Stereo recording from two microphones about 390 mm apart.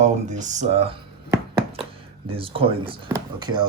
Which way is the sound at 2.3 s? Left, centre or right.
Centre.